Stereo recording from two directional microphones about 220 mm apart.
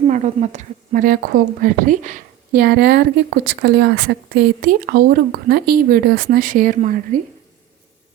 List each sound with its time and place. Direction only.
0.1 s a woman's voice: 35° right (ahead or behind)